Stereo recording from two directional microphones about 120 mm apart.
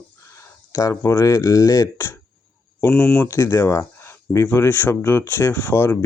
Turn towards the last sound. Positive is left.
turn(degrees=20)  # may be behind; listen again after turning